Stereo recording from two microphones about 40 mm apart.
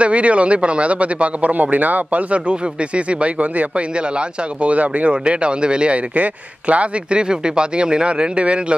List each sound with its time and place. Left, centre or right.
0.0 s speech: right
3.1 s speech: right
5.2 s speech: right
6.1 s speech: right